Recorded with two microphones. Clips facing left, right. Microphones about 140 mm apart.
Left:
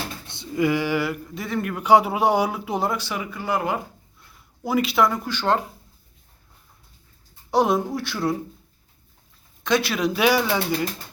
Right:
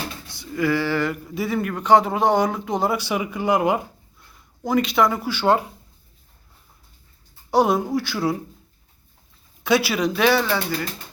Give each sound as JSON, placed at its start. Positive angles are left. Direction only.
{"t": 0.3, "sound": "speech", "side_deg": 20}
{"t": 1.1, "sound": "speech", "side_deg": -5}
{"t": 1.7, "sound": "speech", "side_deg": 10}
{"t": 2.9, "sound": "speech", "side_deg": -15}
{"t": 4.6, "sound": "speech", "side_deg": 5}
{"t": 7.5, "sound": "speech", "side_deg": 0}
{"t": 9.6, "sound": "speech", "side_deg": -5}
{"t": 10.2, "sound": "speech", "side_deg": 10}